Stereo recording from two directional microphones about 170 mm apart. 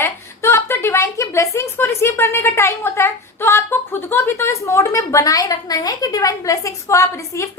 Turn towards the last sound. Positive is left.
turn(degrees=15)  # may be behind; listen again after turning